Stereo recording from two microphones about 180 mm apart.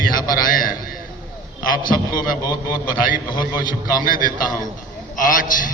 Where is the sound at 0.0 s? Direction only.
50° left (ahead or behind).